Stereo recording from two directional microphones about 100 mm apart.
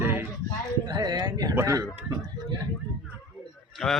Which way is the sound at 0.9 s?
40° right (ahead or behind).